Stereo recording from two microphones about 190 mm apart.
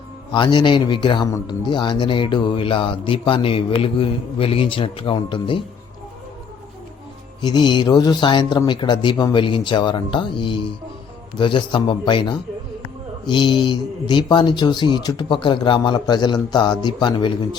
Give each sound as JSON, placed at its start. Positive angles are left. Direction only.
{"t": 0.3, "sound": "a man's voice", "side_deg": 25}
{"t": 7.4, "sound": "a man's voice", "side_deg": 25}